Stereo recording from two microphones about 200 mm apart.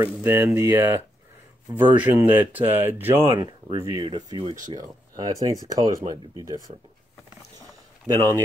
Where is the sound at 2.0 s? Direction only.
10° right (ahead or behind).